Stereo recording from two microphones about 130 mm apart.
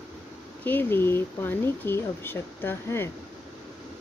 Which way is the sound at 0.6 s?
15° left (ahead or behind).